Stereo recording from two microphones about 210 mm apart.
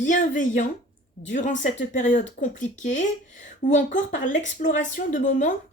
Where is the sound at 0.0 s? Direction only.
40° left (ahead or behind).